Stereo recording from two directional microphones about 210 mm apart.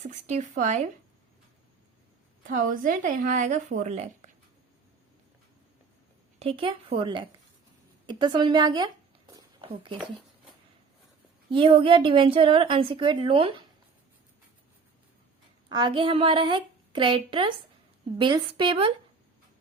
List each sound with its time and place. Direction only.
0.0 s speech: 35° right (ahead or behind)
2.6 s speech: 40° right (ahead or behind)
6.4 s a woman's voice: 25° right (ahead or behind)
9.6 s a sound: 25° right (ahead or behind)
11.5 s a woman's voice: 25° right (ahead or behind)
15.7 s a woman's voice: 20° right (ahead or behind)